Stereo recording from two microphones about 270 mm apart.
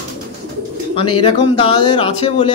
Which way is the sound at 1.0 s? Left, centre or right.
Centre.